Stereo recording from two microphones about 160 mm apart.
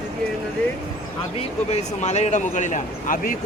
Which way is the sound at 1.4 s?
45° left (ahead or behind).